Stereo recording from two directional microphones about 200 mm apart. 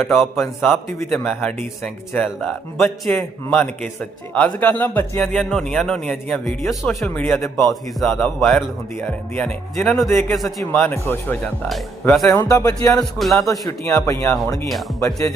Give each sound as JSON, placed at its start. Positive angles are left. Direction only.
{"t": 0.2, "sound": "speech", "side_deg": 5}
{"t": 10.1, "sound": "speech", "side_deg": 15}
{"t": 12.3, "sound": "speech", "side_deg": 15}